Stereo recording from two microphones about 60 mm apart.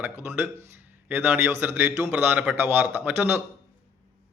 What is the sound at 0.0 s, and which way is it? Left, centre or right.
A man's voice, right.